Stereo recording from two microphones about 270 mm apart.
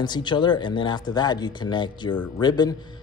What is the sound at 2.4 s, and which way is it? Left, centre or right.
Speech, centre.